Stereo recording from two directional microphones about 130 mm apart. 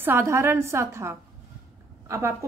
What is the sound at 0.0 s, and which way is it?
A woman's voice, 20° right (ahead or behind).